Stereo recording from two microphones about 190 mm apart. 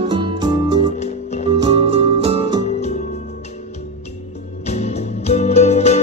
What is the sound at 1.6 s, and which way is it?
Music, 30° right (ahead or behind).